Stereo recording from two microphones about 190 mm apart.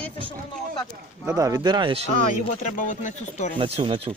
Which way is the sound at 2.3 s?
45° left (ahead or behind).